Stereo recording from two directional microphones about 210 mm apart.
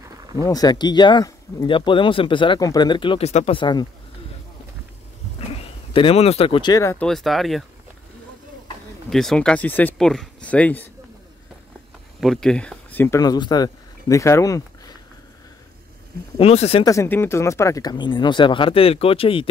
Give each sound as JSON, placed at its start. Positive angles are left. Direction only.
{"t": 0.4, "sound": "speech", "side_deg": 15}
{"t": 5.5, "sound": "speech", "side_deg": 25}
{"t": 7.1, "sound": "speech", "side_deg": 0}
{"t": 9.1, "sound": "speech", "side_deg": 0}
{"t": 12.2, "sound": "speech", "side_deg": 0}
{"t": 16.3, "sound": "speech", "side_deg": 30}
{"t": 16.8, "sound": "speech", "side_deg": 15}